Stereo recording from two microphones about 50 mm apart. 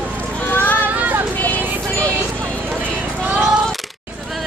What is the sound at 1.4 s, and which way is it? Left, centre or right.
Music, left.